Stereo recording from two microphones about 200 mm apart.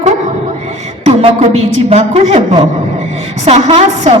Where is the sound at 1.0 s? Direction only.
30° right (ahead or behind).